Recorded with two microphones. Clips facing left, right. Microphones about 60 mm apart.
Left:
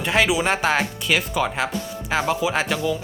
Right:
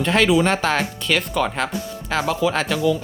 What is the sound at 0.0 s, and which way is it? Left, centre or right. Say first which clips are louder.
Speech: right 3 dB; centre.